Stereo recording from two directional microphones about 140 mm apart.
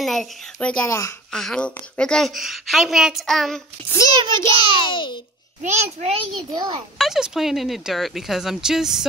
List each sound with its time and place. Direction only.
0.0 s a woman's voice: centre (ahead or behind)
0.8 s a child's voice: 20° left (ahead or behind)
1.3 s a woman's voice: 5° left (ahead or behind)
3.9 s a child's voice: 25° left (ahead or behind)
4.5 s a child's voice: 40° right (ahead or behind)
4.8 s a child's voice: 35° left (ahead or behind)
5.6 s a child's voice: 55° right (ahead or behind)
6.3 s a child's voice: 30° right (ahead or behind)
7.0 s a woman's voice: centre (ahead or behind)